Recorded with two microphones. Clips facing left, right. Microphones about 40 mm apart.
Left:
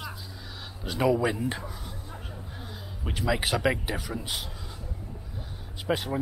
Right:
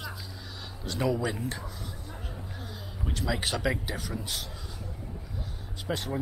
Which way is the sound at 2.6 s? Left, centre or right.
Centre.